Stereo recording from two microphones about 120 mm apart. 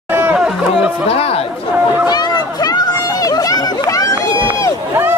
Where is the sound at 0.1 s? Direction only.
15° right (ahead or behind).